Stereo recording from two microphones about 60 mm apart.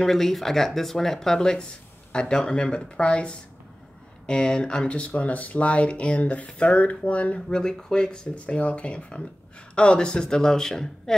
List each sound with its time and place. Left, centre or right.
0.0 s a man's voice: centre